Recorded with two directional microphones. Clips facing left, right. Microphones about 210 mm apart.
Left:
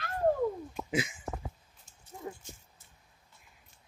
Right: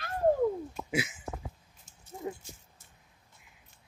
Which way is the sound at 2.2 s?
20° right (ahead or behind).